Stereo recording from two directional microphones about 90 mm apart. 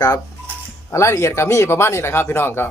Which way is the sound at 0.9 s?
35° left (ahead or behind).